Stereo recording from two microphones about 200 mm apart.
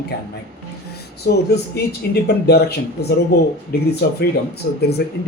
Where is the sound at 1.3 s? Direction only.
50° left (ahead or behind).